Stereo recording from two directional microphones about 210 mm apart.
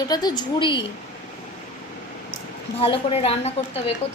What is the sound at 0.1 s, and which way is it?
Speech, 20° left (ahead or behind).